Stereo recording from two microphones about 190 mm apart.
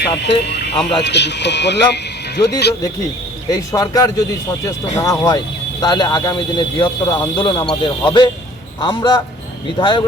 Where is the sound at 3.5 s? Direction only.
20° left (ahead or behind).